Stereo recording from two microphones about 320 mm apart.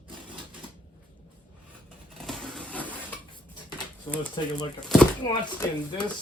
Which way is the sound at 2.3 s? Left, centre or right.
Centre.